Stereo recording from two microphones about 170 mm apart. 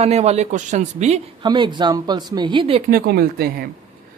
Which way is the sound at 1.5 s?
25° right (ahead or behind).